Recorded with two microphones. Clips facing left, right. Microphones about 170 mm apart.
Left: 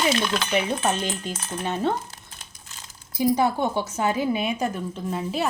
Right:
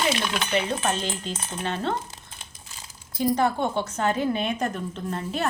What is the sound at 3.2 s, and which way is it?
A woman's voice, 10° left (ahead or behind).